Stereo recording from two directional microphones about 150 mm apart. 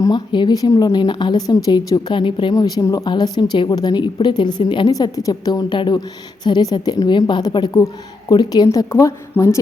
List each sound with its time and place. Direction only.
0.0 s a woman's voice: 30° left (ahead or behind)